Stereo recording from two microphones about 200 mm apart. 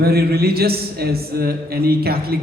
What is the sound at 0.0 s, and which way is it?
A man's voice, 50° right (ahead or behind).